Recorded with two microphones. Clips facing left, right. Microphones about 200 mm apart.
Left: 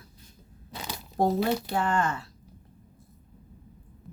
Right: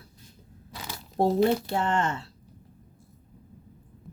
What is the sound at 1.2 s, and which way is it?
Speech, 25° right (ahead or behind).